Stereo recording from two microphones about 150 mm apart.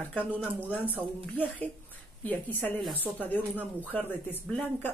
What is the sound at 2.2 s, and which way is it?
Speech, 10° left (ahead or behind).